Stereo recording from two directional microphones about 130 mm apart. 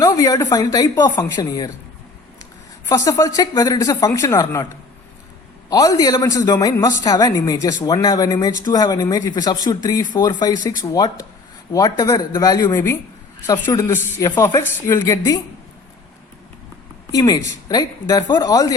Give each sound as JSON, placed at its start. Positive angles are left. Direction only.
{"t": 0.0, "sound": "speech", "side_deg": 25}
{"t": 2.9, "sound": "speech", "side_deg": 25}
{"t": 17.1, "sound": "speech", "side_deg": 30}